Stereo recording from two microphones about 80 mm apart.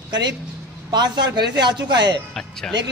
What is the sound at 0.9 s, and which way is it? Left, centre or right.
A man's voice, right.